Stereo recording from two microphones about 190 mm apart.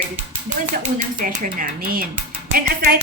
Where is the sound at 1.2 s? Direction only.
45° right (ahead or behind).